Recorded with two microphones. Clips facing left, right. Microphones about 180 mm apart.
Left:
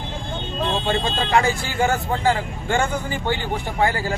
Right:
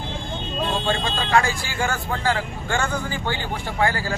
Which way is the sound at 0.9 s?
20° left (ahead or behind).